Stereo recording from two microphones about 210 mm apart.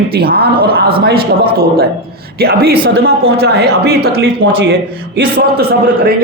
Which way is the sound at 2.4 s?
45° right (ahead or behind).